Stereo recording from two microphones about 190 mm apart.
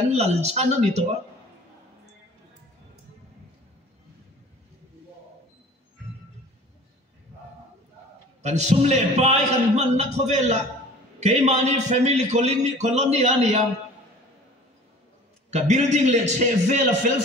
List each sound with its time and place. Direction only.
0.1 s a man's voice: 35° right (ahead or behind)
8.4 s a man's voice: 35° right (ahead or behind)
15.5 s a man's voice: 35° right (ahead or behind)